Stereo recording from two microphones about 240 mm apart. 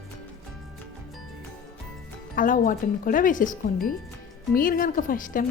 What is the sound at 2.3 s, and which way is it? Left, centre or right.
Speech, left.